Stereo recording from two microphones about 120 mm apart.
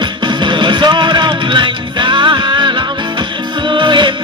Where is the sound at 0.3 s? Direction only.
40° right (ahead or behind).